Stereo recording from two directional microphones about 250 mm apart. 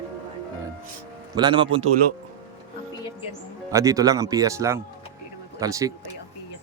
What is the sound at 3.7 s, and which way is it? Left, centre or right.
Speech, centre.